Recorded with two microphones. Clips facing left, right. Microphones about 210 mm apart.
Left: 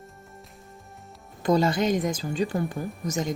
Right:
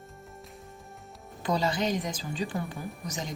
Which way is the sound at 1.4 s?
50° left (ahead or behind).